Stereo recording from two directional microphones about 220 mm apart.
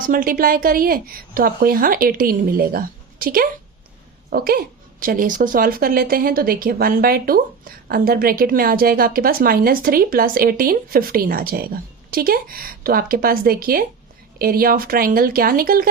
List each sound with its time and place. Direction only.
0.0 s a woman's voice: 40° right (ahead or behind)